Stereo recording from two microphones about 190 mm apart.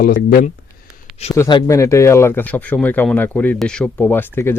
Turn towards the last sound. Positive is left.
turn(degrees=10)  # may be behind; listen again after turning